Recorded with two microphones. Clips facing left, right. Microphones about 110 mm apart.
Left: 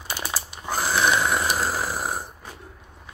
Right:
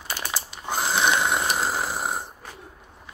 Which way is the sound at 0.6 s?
20° right (ahead or behind).